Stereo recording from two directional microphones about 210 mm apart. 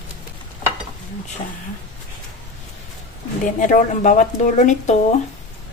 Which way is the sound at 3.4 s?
35° left (ahead or behind).